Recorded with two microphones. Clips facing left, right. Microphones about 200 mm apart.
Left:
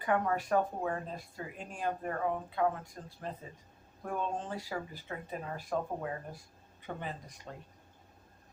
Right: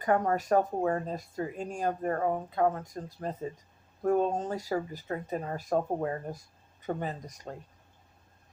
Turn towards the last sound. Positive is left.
turn(degrees=-40)  # may be behind; listen again after turning